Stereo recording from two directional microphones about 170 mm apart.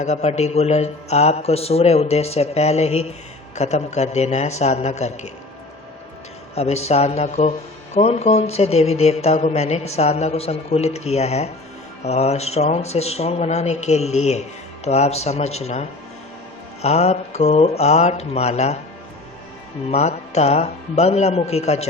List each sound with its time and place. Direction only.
0.0 s speech: 40° left (ahead or behind)
6.6 s speech: 40° left (ahead or behind)
19.9 s speech: 40° left (ahead or behind)